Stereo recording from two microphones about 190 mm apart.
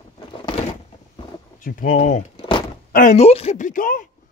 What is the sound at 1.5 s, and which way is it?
Speech, 45° left (ahead or behind).